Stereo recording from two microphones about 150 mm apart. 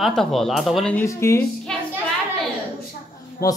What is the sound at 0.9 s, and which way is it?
Speech, 15° left (ahead or behind).